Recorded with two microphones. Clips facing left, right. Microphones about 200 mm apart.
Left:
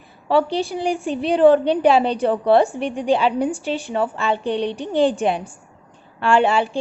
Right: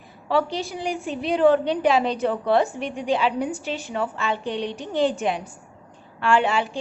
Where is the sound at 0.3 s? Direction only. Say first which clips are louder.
Left 5 dB; 30° left (ahead or behind).